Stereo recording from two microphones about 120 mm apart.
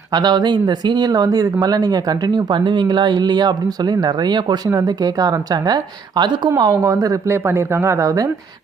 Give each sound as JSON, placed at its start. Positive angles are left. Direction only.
{"t": 0.1, "sound": "speech", "side_deg": -35}